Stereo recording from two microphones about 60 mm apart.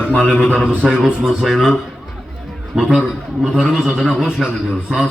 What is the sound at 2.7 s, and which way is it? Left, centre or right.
A man's voice, centre.